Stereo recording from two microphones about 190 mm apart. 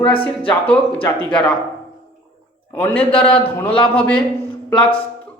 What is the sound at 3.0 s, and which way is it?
A man's voice, 30° left (ahead or behind).